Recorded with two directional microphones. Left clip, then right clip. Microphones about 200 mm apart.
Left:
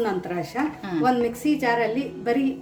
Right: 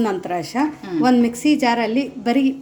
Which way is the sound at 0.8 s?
Centre (ahead or behind).